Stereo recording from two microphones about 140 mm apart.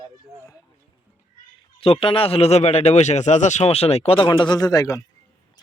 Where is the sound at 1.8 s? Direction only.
40° left (ahead or behind); by 5.0 s 25° left (ahead or behind).